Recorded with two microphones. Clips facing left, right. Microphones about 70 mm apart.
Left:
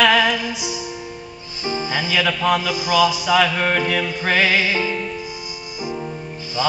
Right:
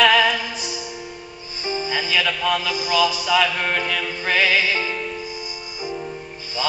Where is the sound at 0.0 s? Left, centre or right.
Centre.